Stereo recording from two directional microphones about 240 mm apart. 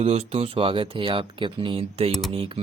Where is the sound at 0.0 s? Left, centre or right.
Right.